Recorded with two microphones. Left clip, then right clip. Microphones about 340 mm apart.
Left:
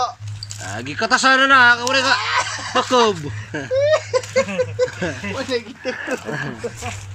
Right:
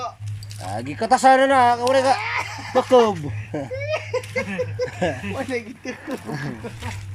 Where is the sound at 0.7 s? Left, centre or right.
Centre.